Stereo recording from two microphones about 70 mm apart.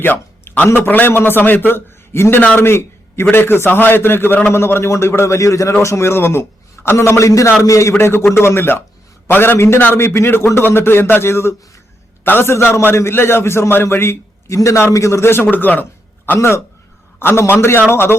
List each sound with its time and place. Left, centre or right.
0.0 s a man's voice: left
4.5 s a man's voice: left
7.9 s a man's voice: left